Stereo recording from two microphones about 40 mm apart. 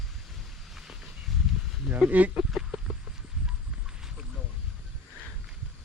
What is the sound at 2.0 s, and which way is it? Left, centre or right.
Speech, right.